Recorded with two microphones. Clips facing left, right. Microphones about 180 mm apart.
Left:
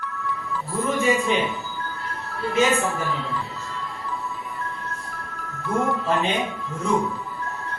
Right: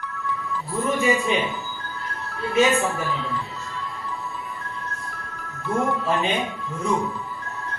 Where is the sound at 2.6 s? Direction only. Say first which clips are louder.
Right 1 dB; centre (ahead or behind).